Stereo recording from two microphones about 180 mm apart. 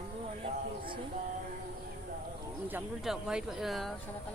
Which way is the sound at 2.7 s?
5° right (ahead or behind).